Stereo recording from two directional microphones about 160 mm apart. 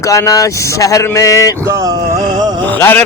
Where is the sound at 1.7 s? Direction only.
20° right (ahead or behind).